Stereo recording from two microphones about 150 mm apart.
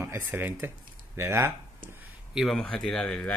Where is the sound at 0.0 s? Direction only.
15° right (ahead or behind).